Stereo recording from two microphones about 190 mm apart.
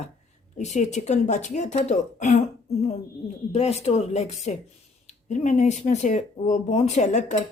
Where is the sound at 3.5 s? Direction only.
35° left (ahead or behind).